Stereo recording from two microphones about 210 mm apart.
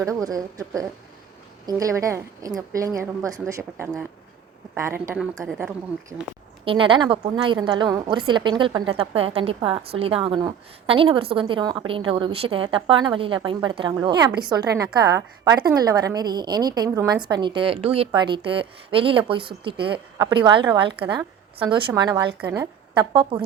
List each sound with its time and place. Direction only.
0.0 s a woman's voice: 15° right (ahead or behind)
6.7 s a woman's voice: 25° right (ahead or behind)